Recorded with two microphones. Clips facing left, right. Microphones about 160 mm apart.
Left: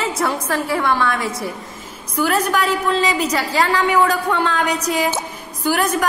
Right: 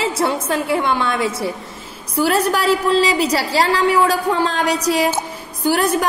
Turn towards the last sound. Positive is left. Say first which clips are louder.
# right 2 dB
turn(degrees=-30)  # may be behind; listen again after turning